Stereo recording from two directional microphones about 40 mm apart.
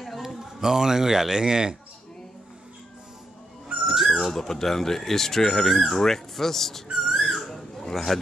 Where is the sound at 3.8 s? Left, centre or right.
Centre.